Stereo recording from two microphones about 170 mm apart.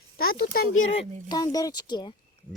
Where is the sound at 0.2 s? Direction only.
65° left (ahead or behind).